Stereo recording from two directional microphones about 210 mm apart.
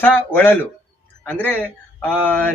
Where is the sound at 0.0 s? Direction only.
10° left (ahead or behind).